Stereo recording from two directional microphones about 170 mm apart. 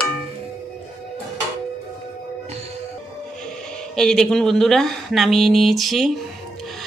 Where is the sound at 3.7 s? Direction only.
5° left (ahead or behind).